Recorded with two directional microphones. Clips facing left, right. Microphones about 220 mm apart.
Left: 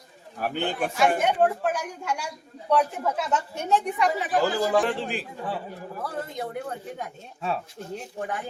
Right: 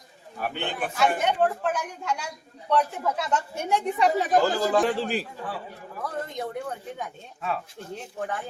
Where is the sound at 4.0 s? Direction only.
40° right (ahead or behind).